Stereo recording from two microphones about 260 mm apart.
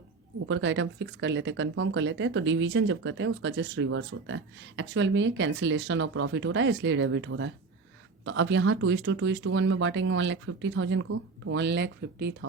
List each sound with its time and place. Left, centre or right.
0.4 s speech: right